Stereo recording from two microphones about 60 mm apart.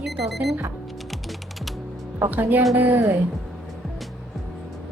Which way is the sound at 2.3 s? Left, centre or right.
Right.